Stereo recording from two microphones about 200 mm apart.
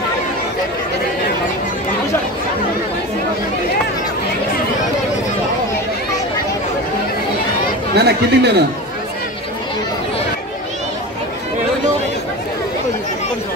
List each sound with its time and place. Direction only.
7.9 s speech: 55° right (ahead or behind)